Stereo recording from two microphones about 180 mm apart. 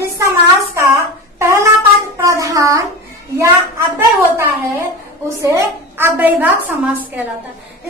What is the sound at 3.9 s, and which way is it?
A woman's voice, 15° right (ahead or behind).